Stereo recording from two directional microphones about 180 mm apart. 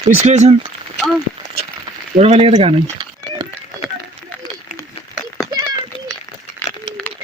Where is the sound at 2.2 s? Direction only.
35° right (ahead or behind).